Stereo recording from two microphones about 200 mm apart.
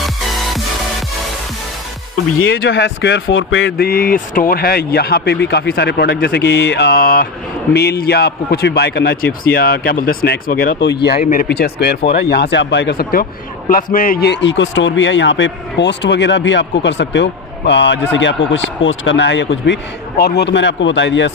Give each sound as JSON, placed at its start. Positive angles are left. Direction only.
{"t": 0.0, "sound": "music", "side_deg": 0}
{"t": 2.4, "sound": "speech", "side_deg": 75}
{"t": 3.8, "sound": "a man's voice", "side_deg": 45}